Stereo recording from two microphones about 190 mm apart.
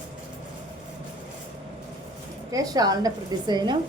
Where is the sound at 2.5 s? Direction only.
20° right (ahead or behind).